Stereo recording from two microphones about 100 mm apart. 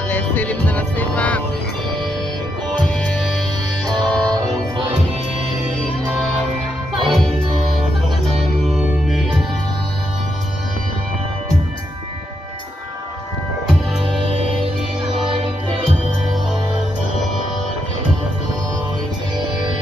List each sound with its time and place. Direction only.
0.1 s music: 15° left (ahead or behind)
2.9 s music: 5° left (ahead or behind)
6.9 s music: centre (ahead or behind)
8.4 s music: centre (ahead or behind)
14.2 s music: 70° right (ahead or behind)